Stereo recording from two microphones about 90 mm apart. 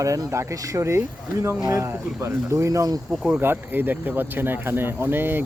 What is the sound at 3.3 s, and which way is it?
Speech, 20° right (ahead or behind).